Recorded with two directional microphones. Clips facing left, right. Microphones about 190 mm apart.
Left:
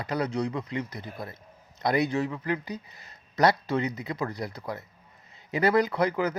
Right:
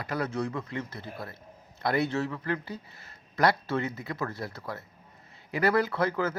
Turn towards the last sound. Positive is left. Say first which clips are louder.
# left 2 dB
turn(degrees=15)  # may be behind; listen again after turning